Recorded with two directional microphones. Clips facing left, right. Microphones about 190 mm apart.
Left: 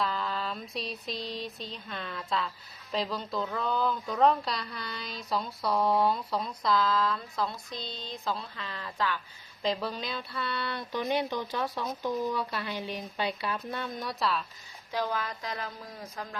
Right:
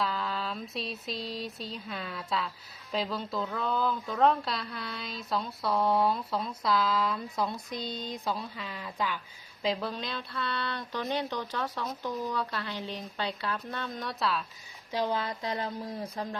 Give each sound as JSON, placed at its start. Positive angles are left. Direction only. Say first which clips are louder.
{"t": 0.0, "sound": "a sound", "louder": "even", "side_deg": 0}
{"t": 2.9, "sound": "speech", "louder": "even", "side_deg": 0}
{"t": 9.6, "sound": "speech", "louder": "even", "side_deg": 0}
{"t": 14.9, "sound": "speech", "louder": "right 2 dB", "side_deg": -20}